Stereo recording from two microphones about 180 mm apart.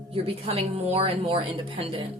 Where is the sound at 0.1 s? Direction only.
30° right (ahead or behind).